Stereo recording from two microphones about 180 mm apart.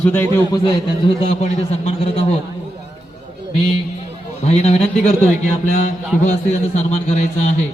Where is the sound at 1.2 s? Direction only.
35° left (ahead or behind).